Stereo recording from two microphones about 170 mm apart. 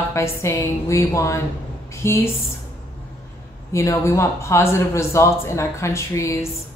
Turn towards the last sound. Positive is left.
turn(degrees=15)  # may be behind; listen again after turning